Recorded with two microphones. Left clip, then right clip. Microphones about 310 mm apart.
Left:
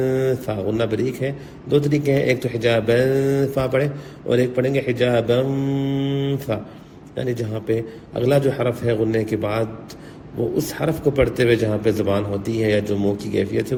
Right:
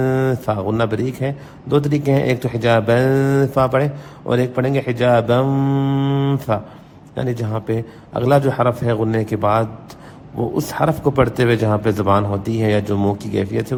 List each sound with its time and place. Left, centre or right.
0.0 s mantra: right
0.3 s a man's voice: centre